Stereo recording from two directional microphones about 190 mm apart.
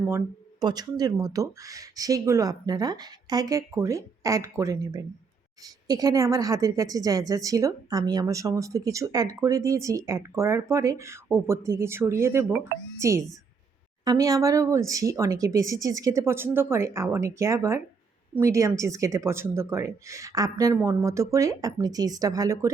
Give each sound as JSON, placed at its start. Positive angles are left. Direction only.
{"t": 0.6, "sound": "a woman's voice", "side_deg": -20}